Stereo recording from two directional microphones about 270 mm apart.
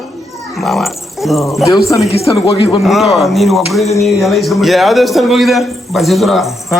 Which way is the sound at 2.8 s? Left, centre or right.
Centre.